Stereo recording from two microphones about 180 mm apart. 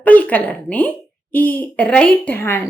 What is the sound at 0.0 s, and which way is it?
Speech, 10° left (ahead or behind).